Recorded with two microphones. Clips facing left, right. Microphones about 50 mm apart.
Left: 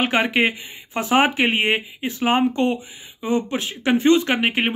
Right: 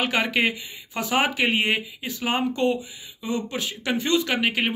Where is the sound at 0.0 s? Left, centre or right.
Left.